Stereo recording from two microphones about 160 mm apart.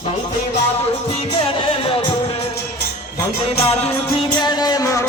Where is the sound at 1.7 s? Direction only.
35° left (ahead or behind).